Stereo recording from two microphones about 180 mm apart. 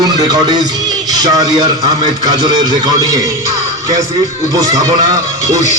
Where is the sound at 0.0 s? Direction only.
20° right (ahead or behind).